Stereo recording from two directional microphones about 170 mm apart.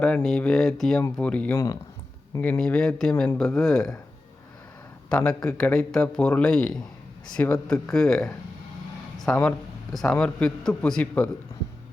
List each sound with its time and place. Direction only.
0.0 s a man's voice: 5° left (ahead or behind)
1.5 s a man's voice: 20° left (ahead or behind); by 3.9 s centre (ahead or behind)
5.0 s a man's voice: 5° left (ahead or behind)